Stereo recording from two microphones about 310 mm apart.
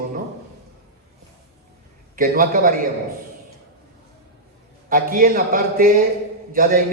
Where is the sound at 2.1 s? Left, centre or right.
Right.